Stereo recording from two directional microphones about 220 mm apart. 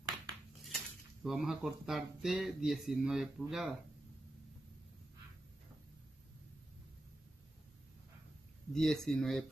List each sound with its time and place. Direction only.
0.7 s speech: centre (ahead or behind)
8.7 s speech: centre (ahead or behind)